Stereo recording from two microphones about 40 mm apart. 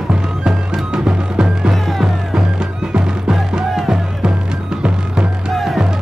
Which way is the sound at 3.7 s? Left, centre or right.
Centre.